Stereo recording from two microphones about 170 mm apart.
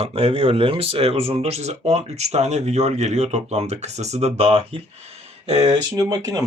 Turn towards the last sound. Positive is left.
turn(degrees=-20)  # may be behind; listen again after turning